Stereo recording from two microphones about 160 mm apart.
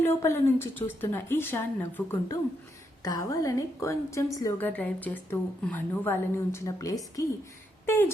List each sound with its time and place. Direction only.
0.0 s a woman's voice: 15° left (ahead or behind)